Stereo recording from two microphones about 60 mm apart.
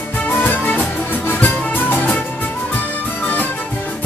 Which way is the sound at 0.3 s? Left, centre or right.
Left.